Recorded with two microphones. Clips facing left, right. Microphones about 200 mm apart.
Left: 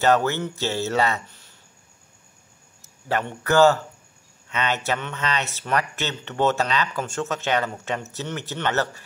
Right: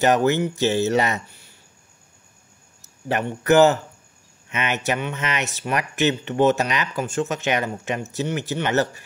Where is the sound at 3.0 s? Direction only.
20° right (ahead or behind).